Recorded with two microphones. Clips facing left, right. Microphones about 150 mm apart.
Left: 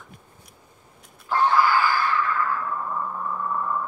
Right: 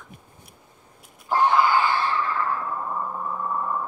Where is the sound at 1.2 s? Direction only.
20° right (ahead or behind).